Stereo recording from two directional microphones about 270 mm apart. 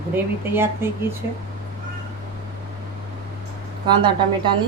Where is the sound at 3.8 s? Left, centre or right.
Centre.